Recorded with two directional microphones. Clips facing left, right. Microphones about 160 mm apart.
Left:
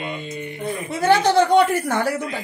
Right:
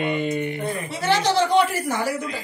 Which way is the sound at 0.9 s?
50° left (ahead or behind).